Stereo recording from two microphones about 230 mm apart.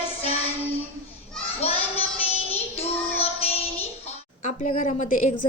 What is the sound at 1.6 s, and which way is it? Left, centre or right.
Child singing, left.